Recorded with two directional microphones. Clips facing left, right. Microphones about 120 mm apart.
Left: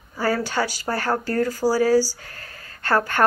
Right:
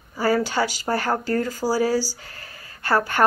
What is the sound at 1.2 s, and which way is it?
Speech, 45° left (ahead or behind).